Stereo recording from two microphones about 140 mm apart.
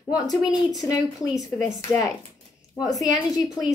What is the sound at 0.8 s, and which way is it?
Speech, 25° left (ahead or behind).